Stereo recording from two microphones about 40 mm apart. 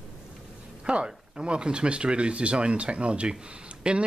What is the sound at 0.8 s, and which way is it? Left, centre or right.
Speech, right.